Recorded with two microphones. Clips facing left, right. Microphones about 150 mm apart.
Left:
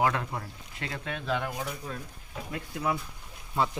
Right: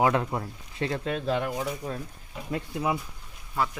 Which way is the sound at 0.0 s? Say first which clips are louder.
Right 4 dB; 25° right (ahead or behind).